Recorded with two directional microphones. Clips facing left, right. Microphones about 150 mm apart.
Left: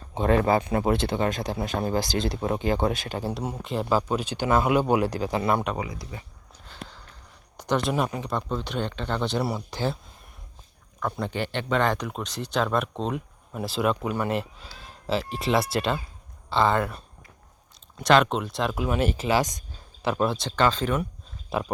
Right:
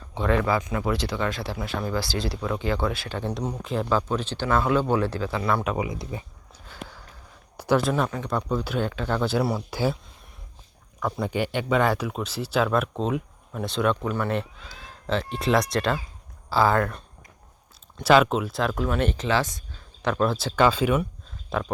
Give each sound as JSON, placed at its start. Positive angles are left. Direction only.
{"t": 0.1, "sound": "speech", "side_deg": 45}
{"t": 1.5, "sound": "speech", "side_deg": 25}
{"t": 2.3, "sound": "speech", "side_deg": 45}
{"t": 2.6, "sound": "speech", "side_deg": 20}
{"t": 3.2, "sound": "speech", "side_deg": 5}
{"t": 5.6, "sound": "speech", "side_deg": -10}
{"t": 5.9, "sound": "speech", "side_deg": -20}
{"t": 6.7, "sound": "a sound", "side_deg": -10}
{"t": 7.9, "sound": "speech", "side_deg": 10}
{"t": 8.3, "sound": "speech", "side_deg": -5}
{"t": 11.0, "sound": "speech", "side_deg": -10}
{"t": 18.0, "sound": "speech", "side_deg": -5}
{"t": 20.0, "sound": "speech", "side_deg": 5}